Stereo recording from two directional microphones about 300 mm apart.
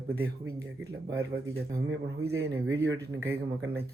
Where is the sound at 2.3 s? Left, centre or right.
Right.